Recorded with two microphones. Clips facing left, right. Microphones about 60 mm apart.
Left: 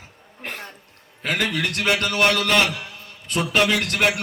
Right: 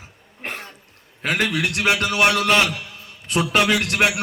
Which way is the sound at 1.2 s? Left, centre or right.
Right.